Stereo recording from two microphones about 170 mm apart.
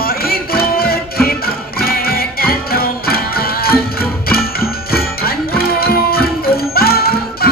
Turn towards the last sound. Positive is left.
turn(degrees=65)  # may be behind; listen again after turning